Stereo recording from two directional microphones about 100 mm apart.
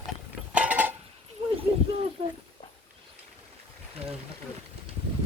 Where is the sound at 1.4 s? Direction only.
70° right (ahead or behind).